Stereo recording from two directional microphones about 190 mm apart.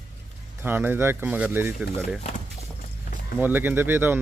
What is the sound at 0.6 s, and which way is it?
Speech, 10° right (ahead or behind).